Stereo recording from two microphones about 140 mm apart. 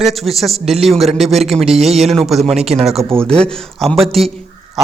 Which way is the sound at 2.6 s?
50° right (ahead or behind).